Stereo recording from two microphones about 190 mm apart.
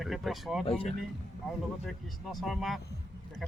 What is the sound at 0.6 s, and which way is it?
Speech, 30° left (ahead or behind).